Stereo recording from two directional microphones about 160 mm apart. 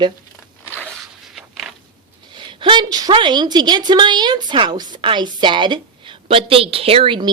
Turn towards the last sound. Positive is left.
turn(degrees=-30)  # may be behind; listen again after turning